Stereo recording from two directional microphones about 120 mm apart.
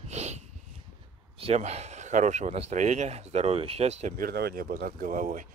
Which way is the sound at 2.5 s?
70° right (ahead or behind).